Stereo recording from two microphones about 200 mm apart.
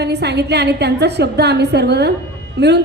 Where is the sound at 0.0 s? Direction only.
55° right (ahead or behind).